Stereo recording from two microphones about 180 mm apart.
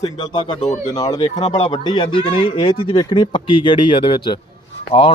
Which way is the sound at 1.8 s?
25° left (ahead or behind).